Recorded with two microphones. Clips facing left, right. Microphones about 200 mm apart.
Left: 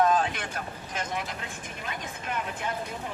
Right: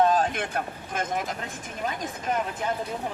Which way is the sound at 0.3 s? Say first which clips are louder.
Right 6 dB; 50° right (ahead or behind).